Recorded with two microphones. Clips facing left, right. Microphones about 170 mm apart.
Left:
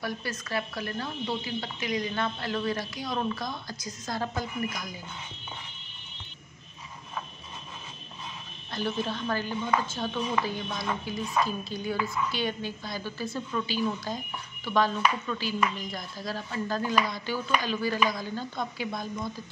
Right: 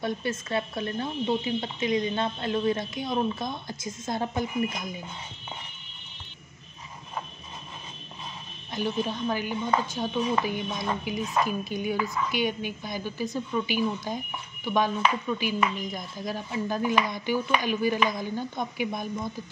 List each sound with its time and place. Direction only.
0.0 s speech: 25° right (ahead or behind)
8.7 s speech: 15° right (ahead or behind)